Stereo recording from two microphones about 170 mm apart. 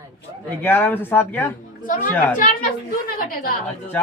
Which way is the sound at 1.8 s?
55° left (ahead or behind).